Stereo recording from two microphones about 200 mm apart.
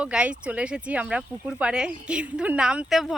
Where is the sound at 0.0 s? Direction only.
5° right (ahead or behind).